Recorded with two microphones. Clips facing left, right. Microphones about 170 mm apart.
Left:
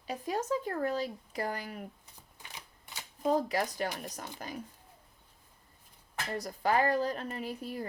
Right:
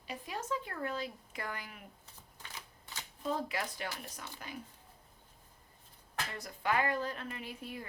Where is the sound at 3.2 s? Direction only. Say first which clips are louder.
Left 7 dB; 40° left (ahead or behind).